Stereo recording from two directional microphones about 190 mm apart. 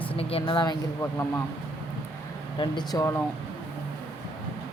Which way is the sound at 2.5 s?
20° left (ahead or behind).